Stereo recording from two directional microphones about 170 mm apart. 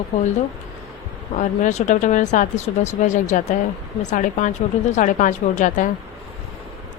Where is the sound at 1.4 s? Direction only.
45° left (ahead or behind).